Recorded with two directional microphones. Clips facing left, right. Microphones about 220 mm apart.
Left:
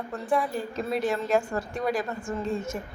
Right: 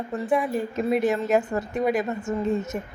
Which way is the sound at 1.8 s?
20° right (ahead or behind).